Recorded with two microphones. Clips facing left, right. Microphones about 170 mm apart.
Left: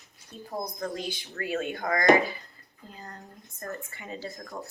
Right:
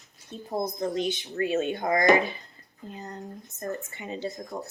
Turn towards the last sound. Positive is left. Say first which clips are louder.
# right 4 dB
turn(degrees=-20)  # may be behind; listen again after turning